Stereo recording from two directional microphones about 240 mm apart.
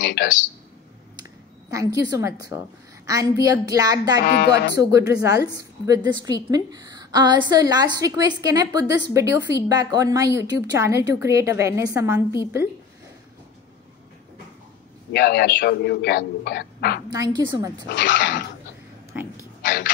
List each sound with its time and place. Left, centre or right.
0.0 s speech: left
1.7 s a woman's voice: centre
4.2 s a man's voice: left
4.7 s a woman's voice: centre
15.1 s a man's voice: left
17.1 s a woman's voice: centre
17.8 s speech: left
19.6 s a sound: left